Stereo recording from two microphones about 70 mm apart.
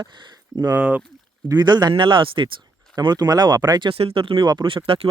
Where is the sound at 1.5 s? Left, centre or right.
Right.